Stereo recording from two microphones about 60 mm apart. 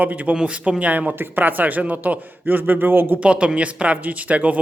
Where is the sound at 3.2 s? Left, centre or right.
Centre.